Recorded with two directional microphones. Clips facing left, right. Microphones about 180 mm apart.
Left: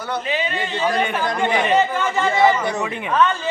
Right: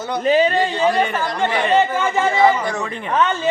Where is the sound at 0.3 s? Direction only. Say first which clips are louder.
Right 12 dB; 40° right (ahead or behind).